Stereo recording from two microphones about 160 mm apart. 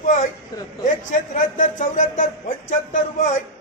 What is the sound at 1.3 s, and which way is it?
Speech, 55° left (ahead or behind).